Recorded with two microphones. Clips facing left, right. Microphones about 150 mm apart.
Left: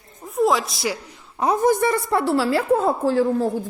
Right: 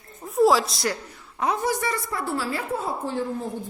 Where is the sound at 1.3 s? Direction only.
35° left (ahead or behind).